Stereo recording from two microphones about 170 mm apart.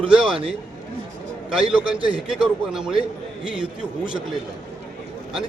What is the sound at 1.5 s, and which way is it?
A man's voice, 5° right (ahead or behind).